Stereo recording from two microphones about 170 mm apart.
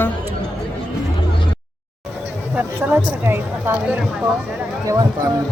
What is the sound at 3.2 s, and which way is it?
Speech, 15° right (ahead or behind).